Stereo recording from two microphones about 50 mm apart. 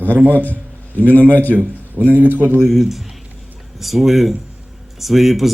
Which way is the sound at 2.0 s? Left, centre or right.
Right.